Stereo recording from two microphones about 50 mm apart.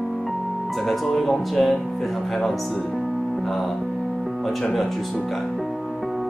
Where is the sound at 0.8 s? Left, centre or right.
Centre.